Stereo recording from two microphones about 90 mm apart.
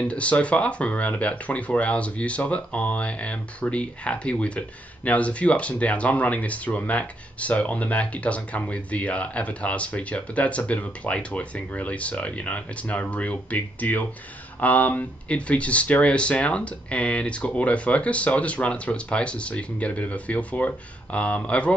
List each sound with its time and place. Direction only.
0.0 s speech: 15° left (ahead or behind)